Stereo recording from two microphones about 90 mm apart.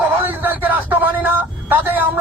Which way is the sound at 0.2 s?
20° right (ahead or behind).